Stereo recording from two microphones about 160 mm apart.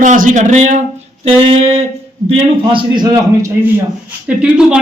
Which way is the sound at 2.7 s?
25° right (ahead or behind).